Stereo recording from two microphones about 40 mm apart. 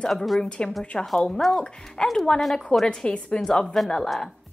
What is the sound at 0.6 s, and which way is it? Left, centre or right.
A woman's voice, left.